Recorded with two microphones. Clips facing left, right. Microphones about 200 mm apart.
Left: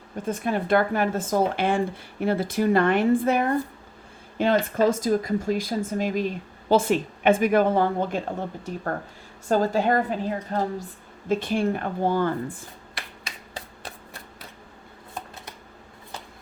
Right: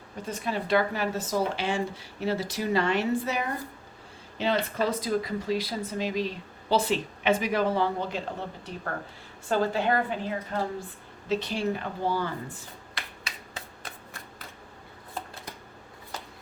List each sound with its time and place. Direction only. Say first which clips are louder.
0.3 s speech: left 5 dB; 50° left (ahead or behind)
9.5 s a woman's voice: left 4 dB; 40° left (ahead or behind)
11.3 s speech: left 4 dB; 50° left (ahead or behind)